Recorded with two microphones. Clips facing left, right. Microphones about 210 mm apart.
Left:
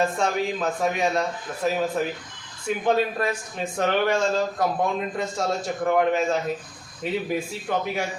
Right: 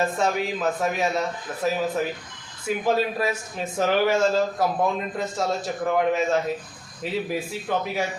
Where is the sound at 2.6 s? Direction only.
5° right (ahead or behind).